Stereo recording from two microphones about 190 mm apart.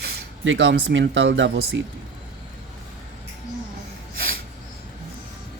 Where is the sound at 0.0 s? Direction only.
70° right (ahead or behind).